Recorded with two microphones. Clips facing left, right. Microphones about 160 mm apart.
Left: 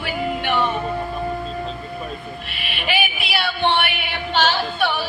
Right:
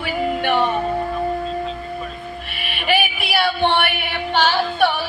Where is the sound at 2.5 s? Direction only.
50° right (ahead or behind).